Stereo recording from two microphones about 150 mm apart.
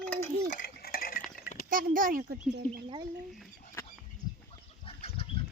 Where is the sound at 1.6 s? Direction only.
70° right (ahead or behind).